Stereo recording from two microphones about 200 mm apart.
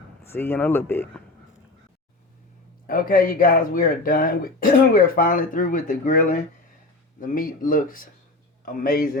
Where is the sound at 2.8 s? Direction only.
45° left (ahead or behind).